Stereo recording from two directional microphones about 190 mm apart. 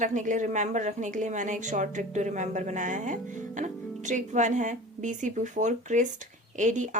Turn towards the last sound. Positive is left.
turn(degrees=-40)  # may be behind; listen again after turning